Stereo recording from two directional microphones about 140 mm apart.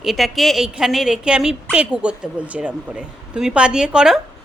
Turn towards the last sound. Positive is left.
turn(degrees=-5)  # may be behind; listen again after turning